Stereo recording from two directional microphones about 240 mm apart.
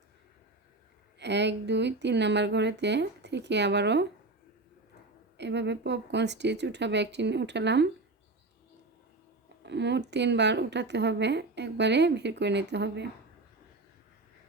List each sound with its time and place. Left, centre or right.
1.2 s a woman's voice: right
5.4 s a woman's voice: right
9.6 s a woman's voice: right